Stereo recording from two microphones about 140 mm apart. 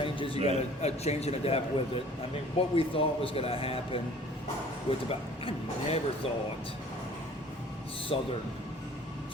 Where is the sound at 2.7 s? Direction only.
40° left (ahead or behind).